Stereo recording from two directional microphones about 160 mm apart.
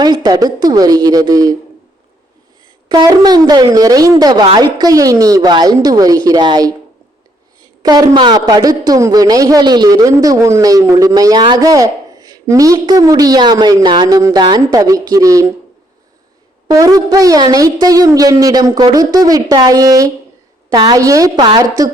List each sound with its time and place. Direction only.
0.0 s a woman's voice: 25° right (ahead or behind)
2.9 s a woman's voice: 25° right (ahead or behind)
7.8 s a woman's voice: 25° right (ahead or behind)
16.6 s a woman's voice: 20° right (ahead or behind)